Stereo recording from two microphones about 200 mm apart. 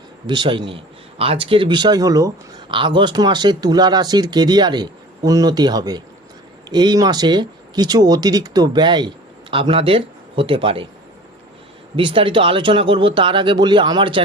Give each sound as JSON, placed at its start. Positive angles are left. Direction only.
{"t": 0.3, "sound": "speech", "side_deg": -25}
{"t": 11.9, "sound": "speech", "side_deg": -25}